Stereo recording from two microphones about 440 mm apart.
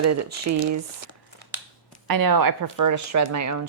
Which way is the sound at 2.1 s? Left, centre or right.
Right.